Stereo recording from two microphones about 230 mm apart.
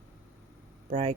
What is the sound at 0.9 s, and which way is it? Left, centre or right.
Speech, right.